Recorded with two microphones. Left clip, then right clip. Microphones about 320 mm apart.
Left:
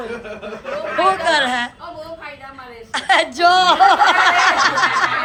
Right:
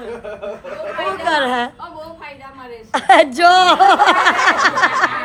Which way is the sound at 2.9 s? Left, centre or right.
Centre.